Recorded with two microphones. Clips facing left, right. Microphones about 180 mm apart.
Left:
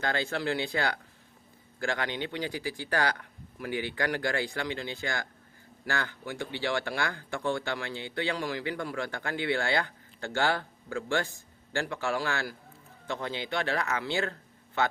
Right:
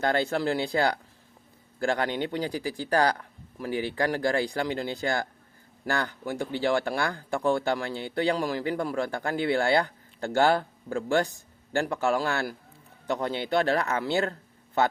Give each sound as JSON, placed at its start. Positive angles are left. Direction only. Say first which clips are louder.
{"t": 0.0, "sound": "speech", "louder": "right 5 dB", "side_deg": -35}